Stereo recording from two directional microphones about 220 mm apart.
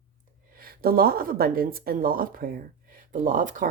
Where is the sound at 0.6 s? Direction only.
40° right (ahead or behind).